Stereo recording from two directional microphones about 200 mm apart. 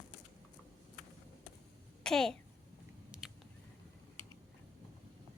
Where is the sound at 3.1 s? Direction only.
5° right (ahead or behind).